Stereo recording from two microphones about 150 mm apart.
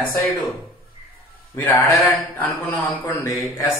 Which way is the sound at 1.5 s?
15° left (ahead or behind).